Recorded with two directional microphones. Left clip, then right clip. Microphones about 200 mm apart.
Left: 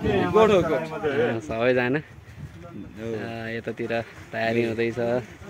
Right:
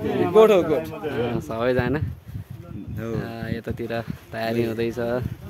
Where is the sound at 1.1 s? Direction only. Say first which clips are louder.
Left 1 dB; 20° right (ahead or behind).